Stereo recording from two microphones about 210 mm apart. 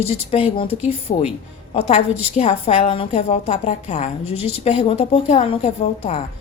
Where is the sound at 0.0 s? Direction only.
30° left (ahead or behind).